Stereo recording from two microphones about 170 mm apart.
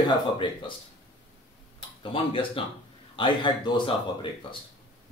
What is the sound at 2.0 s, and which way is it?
A man's voice, 30° left (ahead or behind).